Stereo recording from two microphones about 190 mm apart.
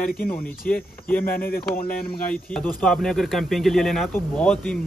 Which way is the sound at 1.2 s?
50° left (ahead or behind).